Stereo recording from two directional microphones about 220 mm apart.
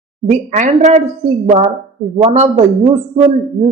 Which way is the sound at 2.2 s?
30° right (ahead or behind).